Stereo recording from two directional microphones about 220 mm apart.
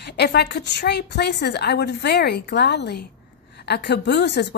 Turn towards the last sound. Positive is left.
turn(degrees=50)  # may be behind; listen again after turning